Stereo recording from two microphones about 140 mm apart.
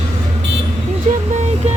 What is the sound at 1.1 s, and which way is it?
Music, 60° right (ahead or behind).